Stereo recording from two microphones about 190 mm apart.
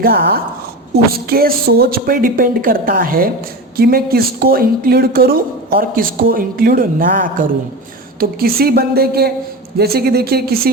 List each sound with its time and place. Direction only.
0.0 s speech: 50° right (ahead or behind)